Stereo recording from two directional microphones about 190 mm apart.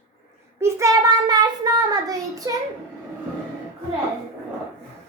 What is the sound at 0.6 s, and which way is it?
Child singing, 15° right (ahead or behind).